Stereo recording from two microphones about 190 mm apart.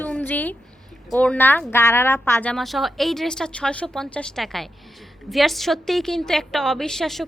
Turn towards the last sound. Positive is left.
turn(degrees=0)  # may be behind; listen again after turning